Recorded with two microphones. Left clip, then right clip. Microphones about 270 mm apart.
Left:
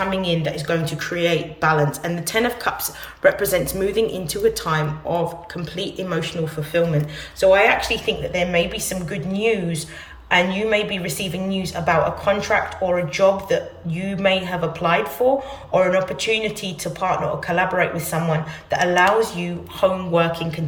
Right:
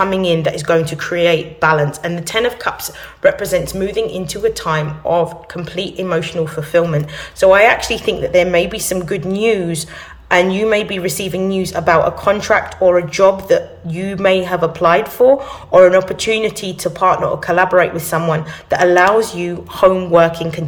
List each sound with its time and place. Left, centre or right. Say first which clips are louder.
0.0 s speech: right 7 dB; centre
19.4 s speech: right 7 dB; centre